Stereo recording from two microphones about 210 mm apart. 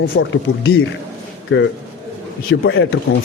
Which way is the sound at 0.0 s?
65° left (ahead or behind).